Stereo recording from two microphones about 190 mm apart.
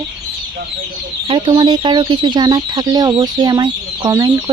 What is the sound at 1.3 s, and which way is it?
Speech, 25° right (ahead or behind).